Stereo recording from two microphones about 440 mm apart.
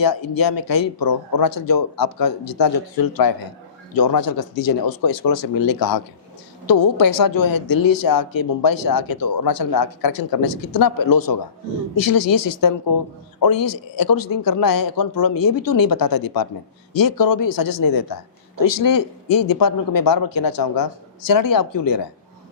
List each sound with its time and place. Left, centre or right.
0.0 s a woman's voice: left